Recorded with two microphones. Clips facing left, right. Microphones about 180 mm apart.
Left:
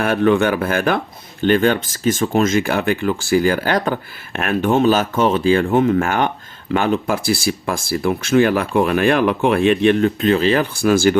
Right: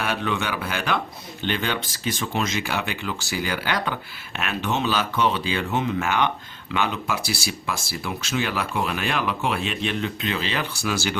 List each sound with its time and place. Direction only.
0.0 s speech: 50° left (ahead or behind)